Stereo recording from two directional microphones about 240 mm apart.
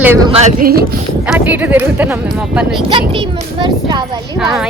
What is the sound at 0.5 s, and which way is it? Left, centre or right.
Speech, right.